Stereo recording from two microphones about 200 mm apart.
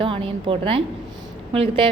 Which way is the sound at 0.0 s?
25° right (ahead or behind).